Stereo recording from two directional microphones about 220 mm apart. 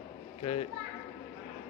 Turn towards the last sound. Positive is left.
turn(degrees=25)  # may be behind; listen again after turning